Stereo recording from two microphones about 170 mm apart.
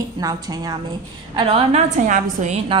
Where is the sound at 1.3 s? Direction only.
35° right (ahead or behind).